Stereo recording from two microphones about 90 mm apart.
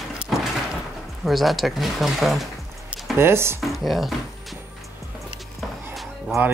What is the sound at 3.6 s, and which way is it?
Speech, centre (ahead or behind).